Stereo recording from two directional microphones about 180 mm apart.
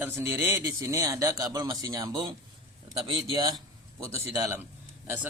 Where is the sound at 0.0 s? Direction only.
10° right (ahead or behind).